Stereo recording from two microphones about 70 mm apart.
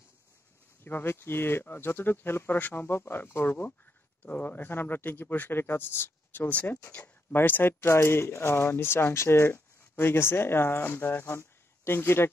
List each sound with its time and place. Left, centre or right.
0.8 s speech: left